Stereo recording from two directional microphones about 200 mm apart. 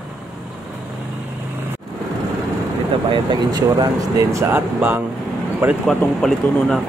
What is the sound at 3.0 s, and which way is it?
Speech, 25° right (ahead or behind).